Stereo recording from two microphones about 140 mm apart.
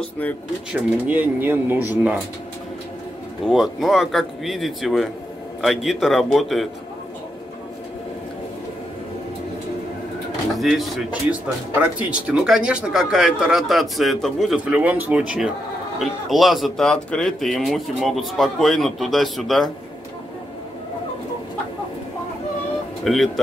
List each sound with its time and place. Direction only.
0.7 s speech: 10° right (ahead or behind)
3.4 s speech: centre (ahead or behind)
10.5 s speech: centre (ahead or behind)
14.6 s speech: 10° right (ahead or behind)
23.0 s speech: centre (ahead or behind)